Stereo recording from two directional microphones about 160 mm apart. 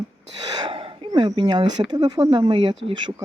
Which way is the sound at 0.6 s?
35° right (ahead or behind).